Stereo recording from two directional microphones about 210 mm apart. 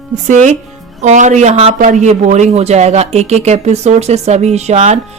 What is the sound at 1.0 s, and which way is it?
Speech, 35° right (ahead or behind).